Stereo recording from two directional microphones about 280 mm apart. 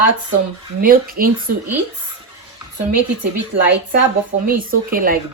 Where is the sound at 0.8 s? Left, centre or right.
Right.